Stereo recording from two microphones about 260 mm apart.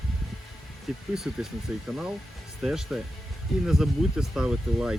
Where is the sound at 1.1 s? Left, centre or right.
Centre.